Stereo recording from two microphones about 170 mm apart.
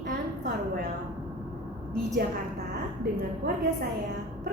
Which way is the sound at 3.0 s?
60° right (ahead or behind).